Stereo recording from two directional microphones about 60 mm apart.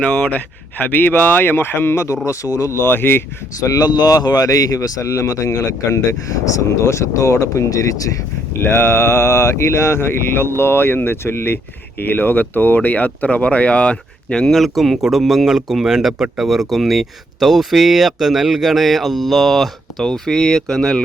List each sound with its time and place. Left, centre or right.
0.0 s speech: left
1.5 s speech: left
2.2 s speech: left
2.7 s speech: left
3.6 s speech: left
8.6 s speech: left; by 21.0 s centre